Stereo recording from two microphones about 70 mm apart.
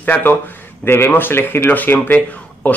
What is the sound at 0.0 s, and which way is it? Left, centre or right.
Speech, left.